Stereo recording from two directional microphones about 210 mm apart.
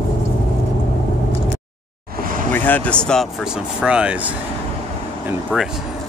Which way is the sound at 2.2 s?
40° right (ahead or behind).